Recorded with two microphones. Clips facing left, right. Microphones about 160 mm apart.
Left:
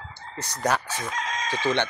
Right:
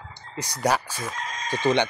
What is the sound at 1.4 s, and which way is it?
Speech, 15° right (ahead or behind).